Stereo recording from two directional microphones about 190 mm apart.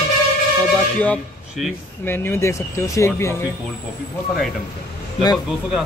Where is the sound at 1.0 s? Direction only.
5° left (ahead or behind).